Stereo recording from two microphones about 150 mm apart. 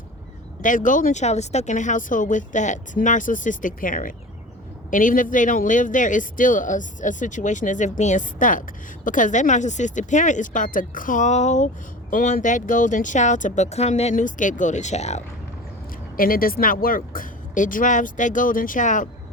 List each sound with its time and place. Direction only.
0.6 s a man's voice: 60° left (ahead or behind)
16.1 s a man's voice: 70° left (ahead or behind)